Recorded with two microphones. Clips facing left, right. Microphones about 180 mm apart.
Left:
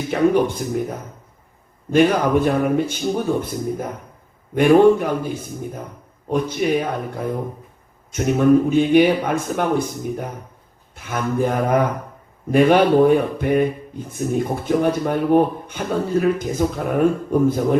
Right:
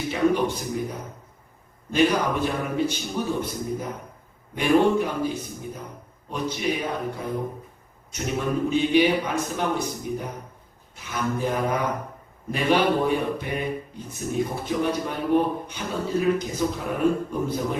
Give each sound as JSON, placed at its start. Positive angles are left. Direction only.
{"t": 0.1, "sound": "speech", "side_deg": 50}
{"t": 1.9, "sound": "speech", "side_deg": 50}
{"t": 6.3, "sound": "speech", "side_deg": 50}